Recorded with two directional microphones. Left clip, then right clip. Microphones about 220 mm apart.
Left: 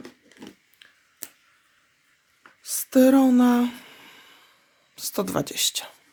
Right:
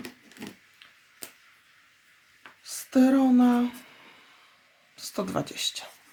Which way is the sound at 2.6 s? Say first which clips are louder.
Left 5 dB; 45° left (ahead or behind).